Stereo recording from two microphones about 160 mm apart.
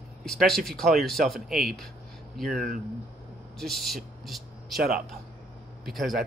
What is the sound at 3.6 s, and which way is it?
Speech, centre (ahead or behind).